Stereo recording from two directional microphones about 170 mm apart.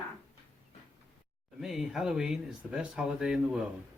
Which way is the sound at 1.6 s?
Centre (ahead or behind).